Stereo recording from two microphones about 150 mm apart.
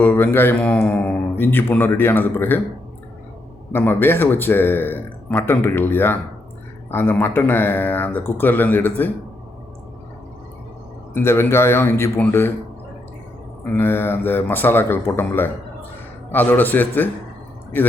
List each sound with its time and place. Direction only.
0.0 s speech: 15° left (ahead or behind)
3.7 s speech: 15° left (ahead or behind)
11.1 s speech: 15° left (ahead or behind)
13.7 s speech: 15° left (ahead or behind)